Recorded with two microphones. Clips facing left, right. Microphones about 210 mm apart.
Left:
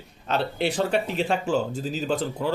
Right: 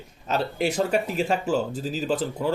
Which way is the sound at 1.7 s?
40° right (ahead or behind).